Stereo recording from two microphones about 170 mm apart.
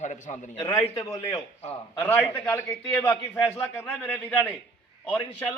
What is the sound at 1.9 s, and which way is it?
A man's voice, 10° left (ahead or behind).